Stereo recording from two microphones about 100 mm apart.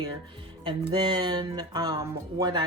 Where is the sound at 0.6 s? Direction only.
50° right (ahead or behind); by 2.5 s 35° right (ahead or behind).